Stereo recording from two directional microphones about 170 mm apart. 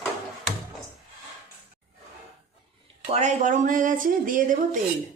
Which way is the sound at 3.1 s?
40° right (ahead or behind).